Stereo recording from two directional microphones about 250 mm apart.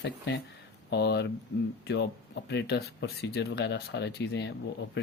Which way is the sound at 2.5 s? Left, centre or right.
Left.